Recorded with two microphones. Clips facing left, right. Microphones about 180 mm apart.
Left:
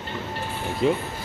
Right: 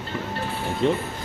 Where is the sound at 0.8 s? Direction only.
5° left (ahead or behind).